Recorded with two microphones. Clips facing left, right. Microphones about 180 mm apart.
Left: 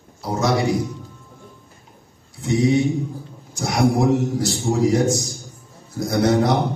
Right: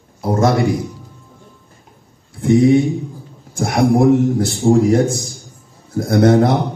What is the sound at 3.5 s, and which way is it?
A man's voice, 55° right (ahead or behind).